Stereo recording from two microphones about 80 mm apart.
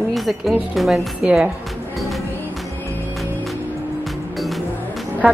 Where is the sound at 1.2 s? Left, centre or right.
Centre.